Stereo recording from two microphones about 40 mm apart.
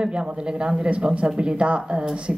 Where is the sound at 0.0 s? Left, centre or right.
Right.